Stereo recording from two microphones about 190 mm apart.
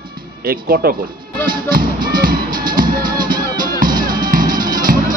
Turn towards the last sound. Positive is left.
turn(degrees=-45)  # may be behind; listen again after turning